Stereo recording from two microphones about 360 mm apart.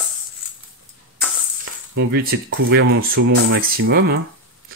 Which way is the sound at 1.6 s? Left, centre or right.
Right.